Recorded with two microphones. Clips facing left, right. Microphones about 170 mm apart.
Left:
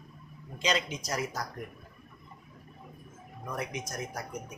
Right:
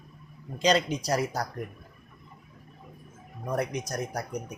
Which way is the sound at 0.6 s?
35° right (ahead or behind).